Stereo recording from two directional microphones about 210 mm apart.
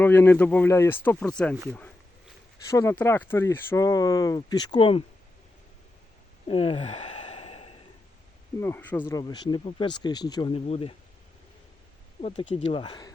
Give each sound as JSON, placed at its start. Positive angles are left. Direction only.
{"t": 0.0, "sound": "speech", "side_deg": 10}
{"t": 2.6, "sound": "speech", "side_deg": 15}
{"t": 6.5, "sound": "sigh", "side_deg": 25}
{"t": 8.6, "sound": "speech", "side_deg": 10}
{"t": 12.2, "sound": "speech", "side_deg": 30}